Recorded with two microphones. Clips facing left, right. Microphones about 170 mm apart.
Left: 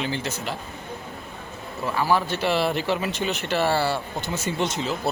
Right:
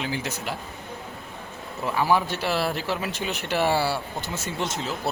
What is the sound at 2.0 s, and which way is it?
Speech, 15° right (ahead or behind).